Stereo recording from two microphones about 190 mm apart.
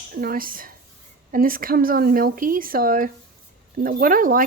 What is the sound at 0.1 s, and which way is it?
Speech, 50° right (ahead or behind).